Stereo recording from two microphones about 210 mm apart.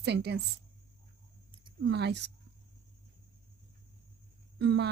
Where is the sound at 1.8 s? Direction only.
55° right (ahead or behind).